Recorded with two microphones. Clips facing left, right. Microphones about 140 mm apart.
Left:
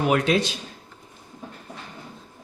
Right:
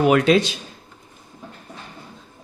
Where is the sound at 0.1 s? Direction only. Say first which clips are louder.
Right 5 dB; 90° right.